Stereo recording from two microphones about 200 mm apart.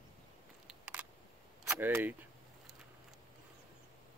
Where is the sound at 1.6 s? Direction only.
10° right (ahead or behind).